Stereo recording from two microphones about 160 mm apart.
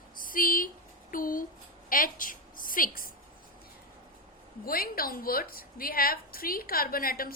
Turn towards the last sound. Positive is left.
turn(degrees=65)  # may be behind; listen again after turning